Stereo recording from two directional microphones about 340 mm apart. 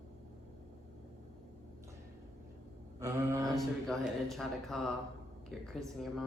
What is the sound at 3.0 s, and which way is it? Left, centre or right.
Mantra, centre.